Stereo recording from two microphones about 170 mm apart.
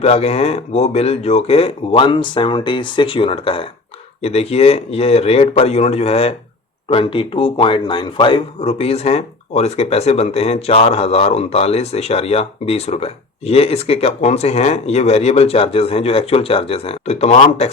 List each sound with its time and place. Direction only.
0.0 s speech: 35° left (ahead or behind)